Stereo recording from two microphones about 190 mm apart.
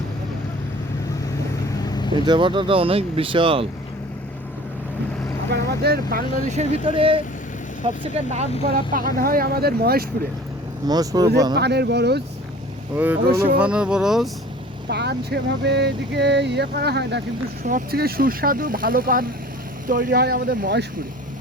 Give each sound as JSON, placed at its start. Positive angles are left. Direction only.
{"t": 1.8, "sound": "vehicle", "side_deg": 20}
{"t": 2.1, "sound": "speech", "side_deg": -25}
{"t": 5.5, "sound": "speech", "side_deg": -55}
{"t": 6.8, "sound": "speech", "side_deg": -30}
{"t": 8.7, "sound": "speech", "side_deg": -45}
{"t": 10.8, "sound": "speech", "side_deg": -20}
{"t": 11.5, "sound": "speech", "side_deg": -60}
{"t": 13.2, "sound": "speech", "side_deg": -55}
{"t": 13.6, "sound": "speech", "side_deg": -5}
{"t": 14.8, "sound": "speech", "side_deg": -60}
{"t": 17.7, "sound": "speech", "side_deg": -50}